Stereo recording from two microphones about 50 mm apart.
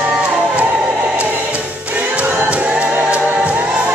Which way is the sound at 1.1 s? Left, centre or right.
Right.